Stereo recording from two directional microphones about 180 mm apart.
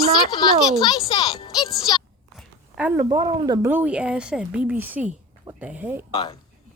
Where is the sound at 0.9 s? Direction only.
25° left (ahead or behind).